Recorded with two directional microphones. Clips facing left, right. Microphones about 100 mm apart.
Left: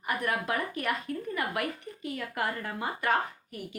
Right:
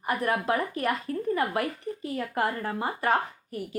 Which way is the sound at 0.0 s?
30° right (ahead or behind).